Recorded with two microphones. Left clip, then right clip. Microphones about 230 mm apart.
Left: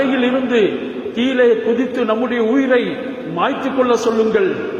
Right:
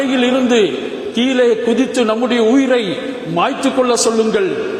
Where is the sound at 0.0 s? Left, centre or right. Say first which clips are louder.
Right 2 dB; right.